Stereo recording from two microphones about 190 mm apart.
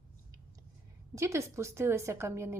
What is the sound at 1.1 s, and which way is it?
A woman's voice, 15° right (ahead or behind).